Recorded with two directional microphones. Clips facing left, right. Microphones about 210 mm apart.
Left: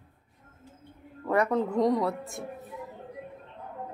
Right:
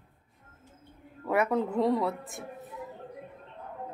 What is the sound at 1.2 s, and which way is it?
A woman's voice, 5° right (ahead or behind).